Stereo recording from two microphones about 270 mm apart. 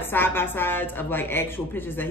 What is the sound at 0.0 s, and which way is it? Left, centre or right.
Speech, centre.